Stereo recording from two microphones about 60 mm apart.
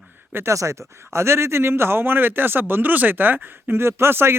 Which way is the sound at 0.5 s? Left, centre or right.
Right.